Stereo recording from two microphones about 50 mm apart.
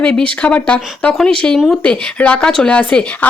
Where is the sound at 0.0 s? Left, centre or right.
Left.